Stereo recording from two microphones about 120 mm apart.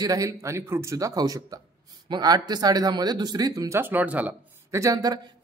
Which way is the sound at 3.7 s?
15° right (ahead or behind).